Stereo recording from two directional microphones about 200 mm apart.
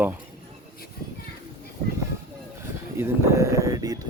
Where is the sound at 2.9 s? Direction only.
10° right (ahead or behind).